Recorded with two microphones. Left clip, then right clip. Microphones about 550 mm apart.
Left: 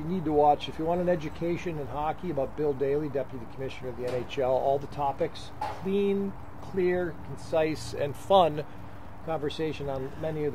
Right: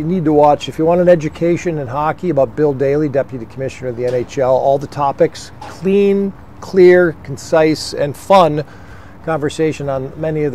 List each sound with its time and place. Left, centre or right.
0.1 s speech: right